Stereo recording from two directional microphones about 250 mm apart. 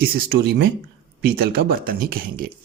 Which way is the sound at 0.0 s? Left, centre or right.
Right.